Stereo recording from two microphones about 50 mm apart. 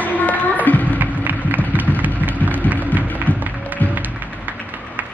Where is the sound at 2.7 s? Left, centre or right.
Right.